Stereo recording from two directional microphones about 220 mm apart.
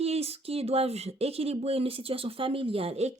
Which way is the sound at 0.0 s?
30° right (ahead or behind).